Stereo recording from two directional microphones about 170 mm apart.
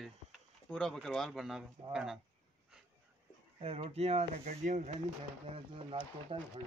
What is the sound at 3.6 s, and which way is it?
Speech, 35° right (ahead or behind).